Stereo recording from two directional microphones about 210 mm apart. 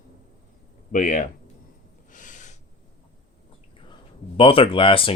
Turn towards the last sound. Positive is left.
turn(degrees=25)  # may be behind; listen again after turning